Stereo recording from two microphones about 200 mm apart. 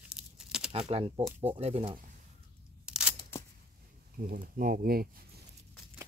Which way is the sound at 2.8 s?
5° right (ahead or behind).